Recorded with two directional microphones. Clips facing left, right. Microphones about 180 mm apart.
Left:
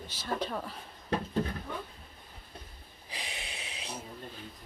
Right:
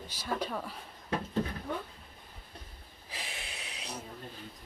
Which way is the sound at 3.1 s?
Centre (ahead or behind).